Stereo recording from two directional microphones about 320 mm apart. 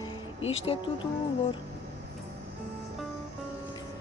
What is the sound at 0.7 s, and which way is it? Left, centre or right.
Speech, centre.